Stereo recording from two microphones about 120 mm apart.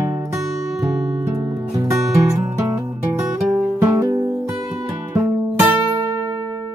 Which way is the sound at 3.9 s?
30° right (ahead or behind).